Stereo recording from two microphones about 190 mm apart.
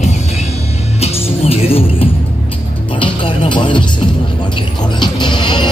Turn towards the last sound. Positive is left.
turn(degrees=25)  # may be behind; listen again after turning